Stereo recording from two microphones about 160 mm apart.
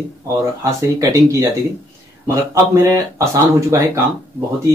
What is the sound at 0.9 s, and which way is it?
Speech, 20° right (ahead or behind).